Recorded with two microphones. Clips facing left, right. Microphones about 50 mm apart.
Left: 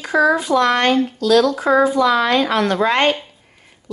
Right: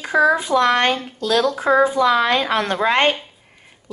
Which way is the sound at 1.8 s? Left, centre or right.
Right.